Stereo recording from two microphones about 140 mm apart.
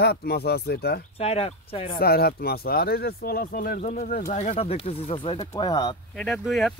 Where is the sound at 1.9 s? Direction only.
90° left.